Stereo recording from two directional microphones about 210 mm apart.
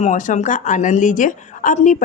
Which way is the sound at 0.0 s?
35° left (ahead or behind).